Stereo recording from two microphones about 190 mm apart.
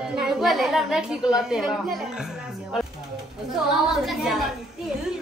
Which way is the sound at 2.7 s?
Centre (ahead or behind).